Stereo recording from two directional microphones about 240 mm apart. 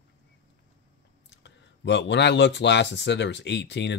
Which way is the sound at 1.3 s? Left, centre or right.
Left.